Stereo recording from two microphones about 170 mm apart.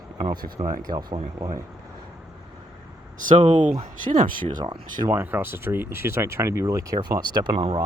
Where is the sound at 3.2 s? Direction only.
50° right (ahead or behind).